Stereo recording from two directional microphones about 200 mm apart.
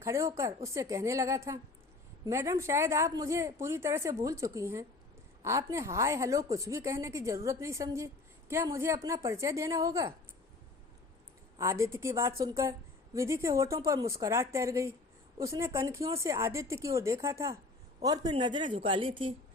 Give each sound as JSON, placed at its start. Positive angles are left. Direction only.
{"t": 0.0, "sound": "a woman's voice", "side_deg": -15}
{"t": 11.5, "sound": "a woman's voice", "side_deg": -15}